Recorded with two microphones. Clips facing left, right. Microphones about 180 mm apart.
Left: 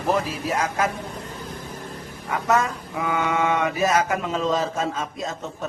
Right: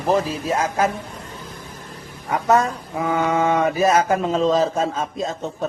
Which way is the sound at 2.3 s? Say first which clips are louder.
Right 4 dB; 35° right (ahead or behind).